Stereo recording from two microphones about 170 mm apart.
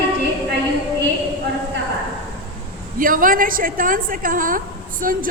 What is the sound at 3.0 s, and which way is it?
A woman's voice, 55° right (ahead or behind).